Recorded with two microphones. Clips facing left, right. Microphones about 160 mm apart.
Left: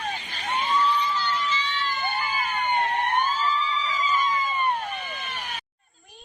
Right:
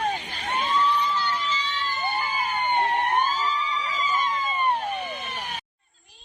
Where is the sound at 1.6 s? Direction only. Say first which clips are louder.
Even; 20° right (ahead or behind); by 3.4 s 40° right (ahead or behind).